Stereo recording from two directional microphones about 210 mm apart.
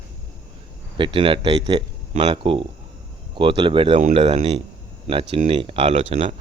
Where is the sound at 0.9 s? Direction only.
25° right (ahead or behind).